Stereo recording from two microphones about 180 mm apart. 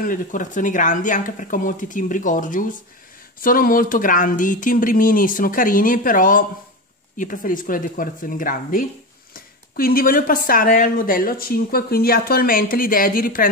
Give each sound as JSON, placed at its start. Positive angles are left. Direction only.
{"t": 0.0, "sound": "speech", "side_deg": 45}